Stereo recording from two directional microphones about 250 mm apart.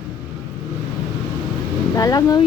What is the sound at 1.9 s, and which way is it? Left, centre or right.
Speech, centre.